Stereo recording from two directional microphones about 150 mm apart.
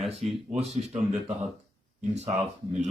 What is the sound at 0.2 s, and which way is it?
Speech, 45° right (ahead or behind).